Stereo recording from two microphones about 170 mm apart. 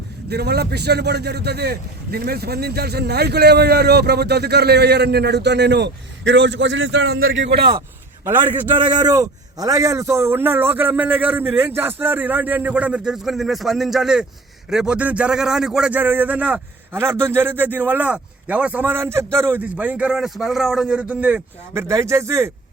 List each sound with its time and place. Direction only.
0.3 s speech: 70° right (ahead or behind)
8.2 s a man's voice: 10° right (ahead or behind)
8.7 s a man's voice: 25° right (ahead or behind); by 21.4 s 5° right (ahead or behind)
21.7 s a man's voice: 15° right (ahead or behind)